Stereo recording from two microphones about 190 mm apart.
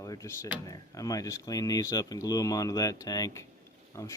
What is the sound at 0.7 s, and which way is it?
Speech, 20° left (ahead or behind).